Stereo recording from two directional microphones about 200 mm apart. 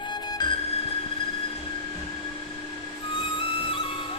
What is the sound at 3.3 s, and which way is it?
Music, 25° left (ahead or behind).